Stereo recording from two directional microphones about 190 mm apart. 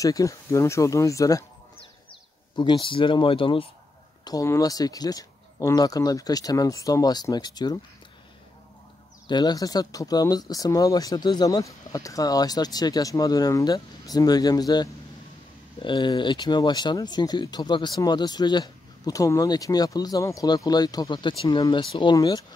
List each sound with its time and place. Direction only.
0.0 s speech: 15° left (ahead or behind)
2.5 s speech: 25° left (ahead or behind)
9.3 s speech: 20° left (ahead or behind)